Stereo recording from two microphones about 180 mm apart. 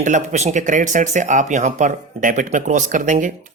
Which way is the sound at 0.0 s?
40° right (ahead or behind).